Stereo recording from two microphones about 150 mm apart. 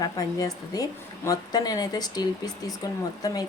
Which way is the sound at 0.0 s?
25° left (ahead or behind).